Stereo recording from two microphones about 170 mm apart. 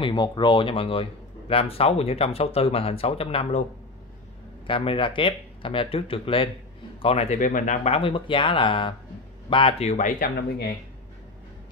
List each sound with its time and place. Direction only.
0.0 s speech: 25° left (ahead or behind)
4.6 s a man's voice: 30° left (ahead or behind)
7.3 s speech: 50° left (ahead or behind)